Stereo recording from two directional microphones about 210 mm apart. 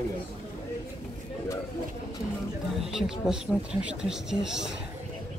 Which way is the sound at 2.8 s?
Centre (ahead or behind).